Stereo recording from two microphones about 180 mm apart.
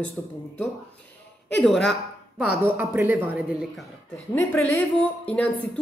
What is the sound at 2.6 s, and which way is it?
Speech, 10° right (ahead or behind).